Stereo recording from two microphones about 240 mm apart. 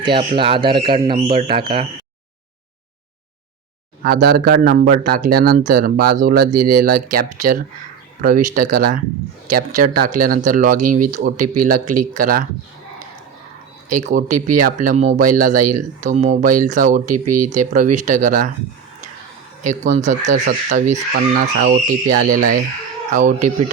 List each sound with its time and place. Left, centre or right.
0.0 s speech: right
4.0 s speech: right
13.9 s speech: right
19.6 s speech: right